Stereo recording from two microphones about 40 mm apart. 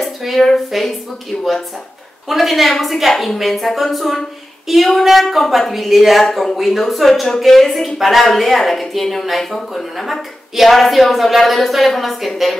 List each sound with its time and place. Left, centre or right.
0.0 s a sound: centre
0.5 s a woman's voice: centre
2.2 s a woman's voice: centre